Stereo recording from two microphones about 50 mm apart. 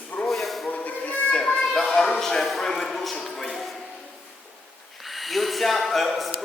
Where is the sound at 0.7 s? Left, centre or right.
Left.